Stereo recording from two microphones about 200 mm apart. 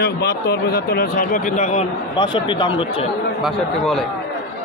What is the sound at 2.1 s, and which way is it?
Speech, 25° left (ahead or behind).